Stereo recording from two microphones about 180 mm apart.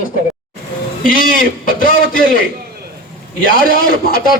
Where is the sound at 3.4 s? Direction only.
55° left (ahead or behind).